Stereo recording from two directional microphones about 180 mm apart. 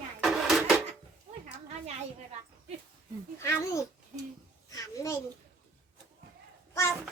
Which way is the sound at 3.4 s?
15° left (ahead or behind).